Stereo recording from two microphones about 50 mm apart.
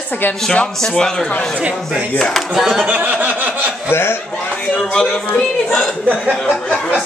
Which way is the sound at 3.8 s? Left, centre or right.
Left.